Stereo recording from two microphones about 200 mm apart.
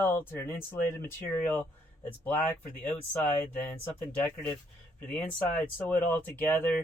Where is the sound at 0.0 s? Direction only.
10° left (ahead or behind).